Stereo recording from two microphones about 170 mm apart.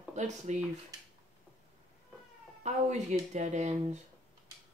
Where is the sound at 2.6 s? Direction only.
45° right (ahead or behind).